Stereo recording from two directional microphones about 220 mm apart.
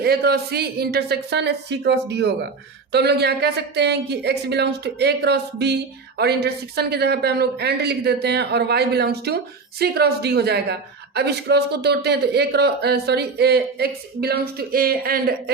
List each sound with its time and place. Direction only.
0.0 s speech: 45° right (ahead or behind)